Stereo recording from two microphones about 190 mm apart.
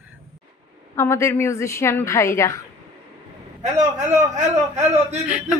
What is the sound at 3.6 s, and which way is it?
A man's voice, 40° right (ahead or behind).